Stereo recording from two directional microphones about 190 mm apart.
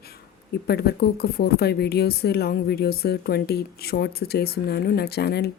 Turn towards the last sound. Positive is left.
turn(degrees=55)  # may be behind; listen again after turning